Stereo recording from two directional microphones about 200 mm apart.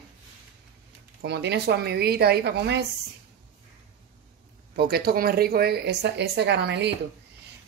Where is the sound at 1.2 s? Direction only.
55° right (ahead or behind).